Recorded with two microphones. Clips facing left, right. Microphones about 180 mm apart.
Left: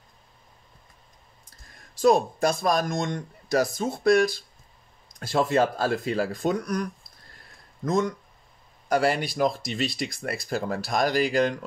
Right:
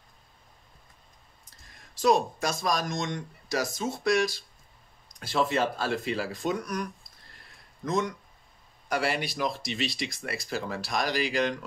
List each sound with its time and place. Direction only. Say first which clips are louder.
2.0 s speech: left 4 dB; 50° left (ahead or behind); by 8.1 s 35° left (ahead or behind)
8.8 s speech: left 6 dB; 45° left (ahead or behind)